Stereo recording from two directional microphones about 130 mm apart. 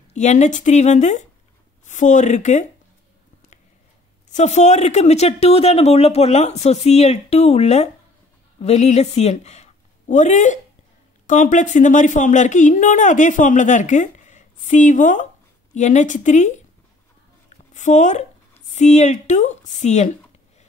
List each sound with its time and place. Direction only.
0.1 s a woman's voice: 65° left (ahead or behind)
4.3 s a woman's voice: 65° left (ahead or behind)
15.7 s speech: 65° left (ahead or behind)
17.7 s speech: 70° left (ahead or behind)